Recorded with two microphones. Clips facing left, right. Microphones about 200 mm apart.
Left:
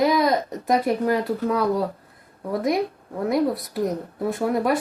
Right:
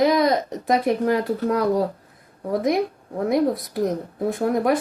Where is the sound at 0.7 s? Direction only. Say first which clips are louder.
Right 1 dB; centre (ahead or behind).